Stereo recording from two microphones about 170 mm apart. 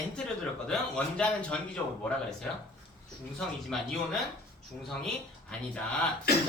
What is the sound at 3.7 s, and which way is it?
Speech, 5° left (ahead or behind).